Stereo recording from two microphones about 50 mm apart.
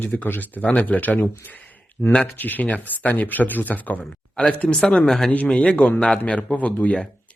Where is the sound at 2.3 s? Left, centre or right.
Left.